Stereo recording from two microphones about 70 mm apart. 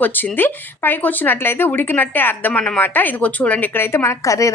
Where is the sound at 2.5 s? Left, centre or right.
Centre.